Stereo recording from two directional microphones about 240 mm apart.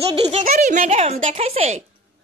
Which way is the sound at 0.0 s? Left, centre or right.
Right.